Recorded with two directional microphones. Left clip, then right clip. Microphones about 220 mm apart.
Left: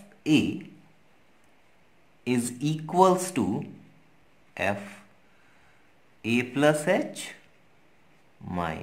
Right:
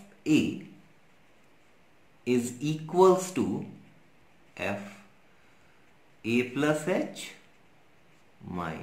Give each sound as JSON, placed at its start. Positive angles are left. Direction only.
{"t": 0.2, "sound": "speech", "side_deg": 35}
{"t": 2.2, "sound": "speech", "side_deg": 40}
{"t": 4.6, "sound": "speech", "side_deg": 40}
{"t": 6.2, "sound": "speech", "side_deg": 40}
{"t": 8.5, "sound": "speech", "side_deg": 40}